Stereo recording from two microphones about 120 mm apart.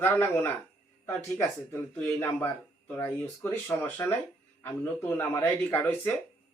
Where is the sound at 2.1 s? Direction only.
15° left (ahead or behind).